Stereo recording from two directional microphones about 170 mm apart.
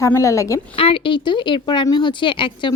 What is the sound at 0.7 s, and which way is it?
Speech, 30° left (ahead or behind).